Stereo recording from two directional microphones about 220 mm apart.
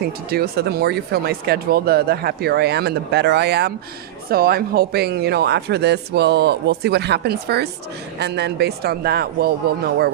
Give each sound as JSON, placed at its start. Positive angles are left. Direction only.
{"t": 0.0, "sound": "speech", "side_deg": -45}